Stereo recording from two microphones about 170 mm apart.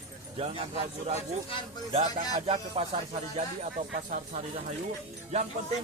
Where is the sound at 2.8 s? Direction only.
35° right (ahead or behind).